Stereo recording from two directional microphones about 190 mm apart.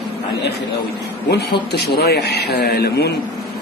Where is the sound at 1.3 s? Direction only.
60° left (ahead or behind).